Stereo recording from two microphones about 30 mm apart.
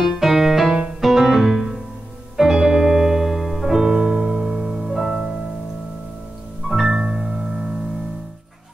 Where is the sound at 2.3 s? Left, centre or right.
Centre.